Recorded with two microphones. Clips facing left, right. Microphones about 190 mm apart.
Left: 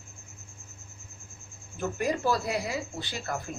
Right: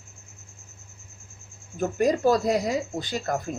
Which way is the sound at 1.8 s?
45° right (ahead or behind).